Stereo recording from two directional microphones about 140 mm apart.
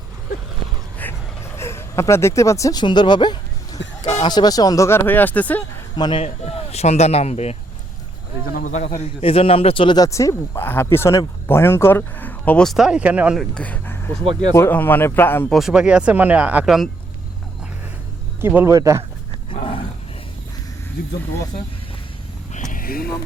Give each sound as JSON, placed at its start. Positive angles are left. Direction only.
{"t": 1.0, "sound": "vehicle", "side_deg": 10}
{"t": 1.5, "sound": "speech", "side_deg": 20}
{"t": 4.0, "sound": "a sound", "side_deg": 45}
{"t": 4.3, "sound": "speech", "side_deg": 30}
{"t": 6.0, "sound": "a man's voice", "side_deg": 35}
{"t": 6.2, "sound": "speech", "side_deg": 50}
{"t": 8.4, "sound": "a man's voice", "side_deg": 75}
{"t": 15.5, "sound": "speech", "side_deg": -5}
{"t": 18.3, "sound": "a man's voice", "side_deg": -15}
{"t": 19.5, "sound": "roaring cats", "side_deg": 40}
{"t": 22.5, "sound": "vehicle", "side_deg": 65}